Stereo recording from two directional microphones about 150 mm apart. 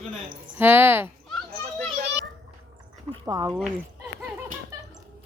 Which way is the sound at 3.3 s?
25° right (ahead or behind).